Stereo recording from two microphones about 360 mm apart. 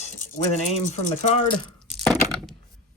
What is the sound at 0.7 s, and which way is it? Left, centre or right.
Speech, centre.